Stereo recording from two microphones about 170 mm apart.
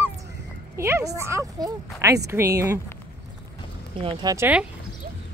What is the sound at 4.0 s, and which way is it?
Speech, 30° right (ahead or behind).